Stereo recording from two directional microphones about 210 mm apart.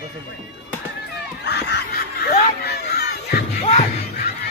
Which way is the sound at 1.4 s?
55° left (ahead or behind).